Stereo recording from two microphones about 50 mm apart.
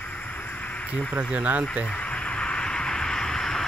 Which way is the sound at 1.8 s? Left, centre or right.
Left.